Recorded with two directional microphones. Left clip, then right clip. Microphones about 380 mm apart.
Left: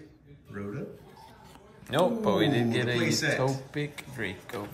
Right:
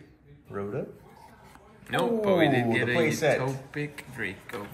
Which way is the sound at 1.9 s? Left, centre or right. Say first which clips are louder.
Right 1 dB; centre.